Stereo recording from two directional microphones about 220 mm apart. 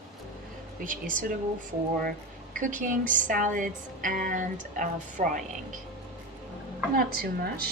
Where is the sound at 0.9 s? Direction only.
40° right (ahead or behind).